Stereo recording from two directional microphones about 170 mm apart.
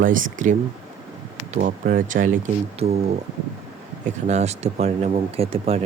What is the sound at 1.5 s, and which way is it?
Speech, 55° right (ahead or behind).